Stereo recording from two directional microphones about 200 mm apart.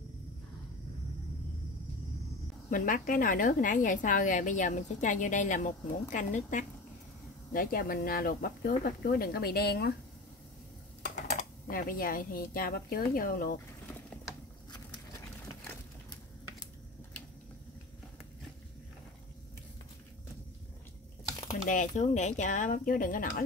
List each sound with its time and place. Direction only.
2.7 s a woman's voice: 45° left (ahead or behind)
11.0 s speech: 40° left (ahead or behind)
21.6 s a woman's voice: 40° left (ahead or behind)